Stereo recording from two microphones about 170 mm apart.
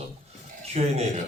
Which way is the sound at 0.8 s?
40° right (ahead or behind).